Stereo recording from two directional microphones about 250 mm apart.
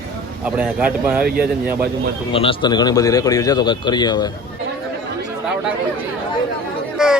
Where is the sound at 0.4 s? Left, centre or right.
Centre.